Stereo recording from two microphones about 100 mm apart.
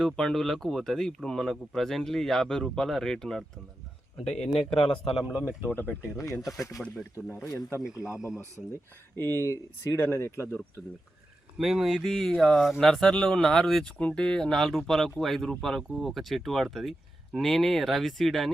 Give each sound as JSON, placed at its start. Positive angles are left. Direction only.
{"t": 0.0, "sound": "speech", "side_deg": 5}
{"t": 5.2, "sound": "speech", "side_deg": -10}
{"t": 5.6, "sound": "speech", "side_deg": 20}
{"t": 6.1, "sound": "speech", "side_deg": 30}
{"t": 7.0, "sound": "speech", "side_deg": 20}
{"t": 7.9, "sound": "speech", "side_deg": -5}
{"t": 9.1, "sound": "speech", "side_deg": 25}
{"t": 11.5, "sound": "speech", "side_deg": -5}